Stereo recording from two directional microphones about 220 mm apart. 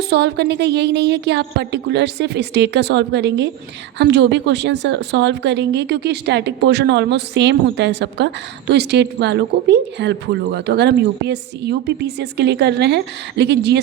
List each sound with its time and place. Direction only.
0.1 s a woman's voice: 50° right (ahead or behind)